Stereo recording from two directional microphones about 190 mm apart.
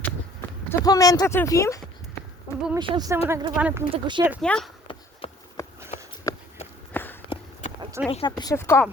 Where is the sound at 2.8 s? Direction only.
20° right (ahead or behind).